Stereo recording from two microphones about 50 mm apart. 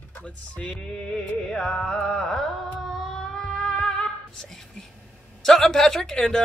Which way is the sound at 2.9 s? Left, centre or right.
Centre.